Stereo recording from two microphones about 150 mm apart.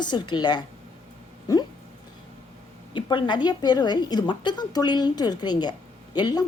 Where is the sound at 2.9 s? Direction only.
30° left (ahead or behind).